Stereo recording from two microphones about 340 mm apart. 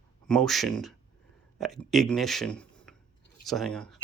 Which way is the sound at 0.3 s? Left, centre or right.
Centre.